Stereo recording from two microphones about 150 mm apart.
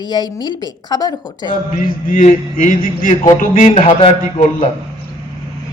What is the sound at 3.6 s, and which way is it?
Speech, 40° left (ahead or behind).